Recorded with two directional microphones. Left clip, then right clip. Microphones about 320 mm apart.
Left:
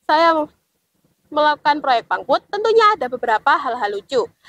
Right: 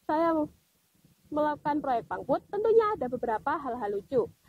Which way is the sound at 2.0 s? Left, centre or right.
Centre.